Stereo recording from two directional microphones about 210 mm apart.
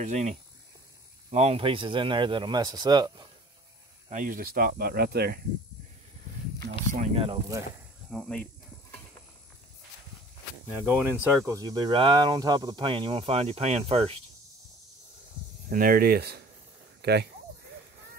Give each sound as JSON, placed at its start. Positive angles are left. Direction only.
{"t": 0.0, "sound": "speech", "side_deg": -35}
{"t": 1.3, "sound": "speech", "side_deg": -30}
{"t": 4.1, "sound": "speech", "side_deg": -40}
{"t": 6.9, "sound": "speech", "side_deg": -30}
{"t": 8.1, "sound": "speech", "side_deg": 5}
{"t": 10.9, "sound": "speech", "side_deg": -10}
{"t": 15.7, "sound": "speech", "side_deg": -45}